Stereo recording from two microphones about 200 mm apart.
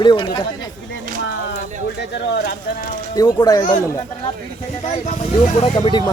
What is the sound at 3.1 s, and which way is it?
Speech, 20° left (ahead or behind).